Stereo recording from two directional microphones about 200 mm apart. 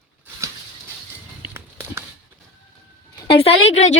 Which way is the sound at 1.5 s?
10° right (ahead or behind).